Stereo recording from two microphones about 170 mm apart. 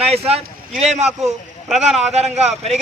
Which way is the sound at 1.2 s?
Centre (ahead or behind).